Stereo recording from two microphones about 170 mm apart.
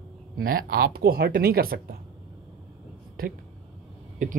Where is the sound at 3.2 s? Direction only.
60° right (ahead or behind).